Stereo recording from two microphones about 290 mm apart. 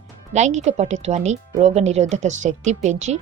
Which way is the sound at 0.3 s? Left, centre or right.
Right.